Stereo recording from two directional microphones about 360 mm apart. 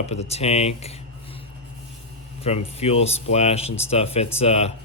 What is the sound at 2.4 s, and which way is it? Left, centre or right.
Speech, centre.